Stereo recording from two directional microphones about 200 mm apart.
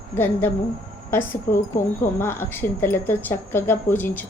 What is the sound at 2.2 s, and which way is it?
A woman's voice, 10° left (ahead or behind).